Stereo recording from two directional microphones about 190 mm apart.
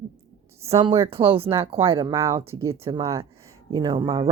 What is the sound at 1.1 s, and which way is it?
Speech, 30° right (ahead or behind).